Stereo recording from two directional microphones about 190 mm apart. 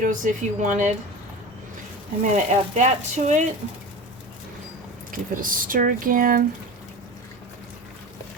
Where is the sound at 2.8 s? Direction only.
40° right (ahead or behind).